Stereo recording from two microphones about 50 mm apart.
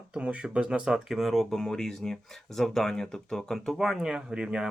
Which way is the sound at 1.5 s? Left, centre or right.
Centre.